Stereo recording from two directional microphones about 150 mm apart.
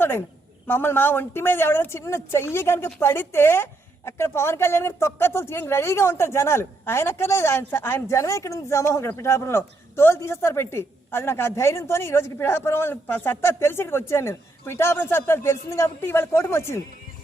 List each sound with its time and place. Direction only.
0.7 s a woman's voice: 15° left (ahead or behind)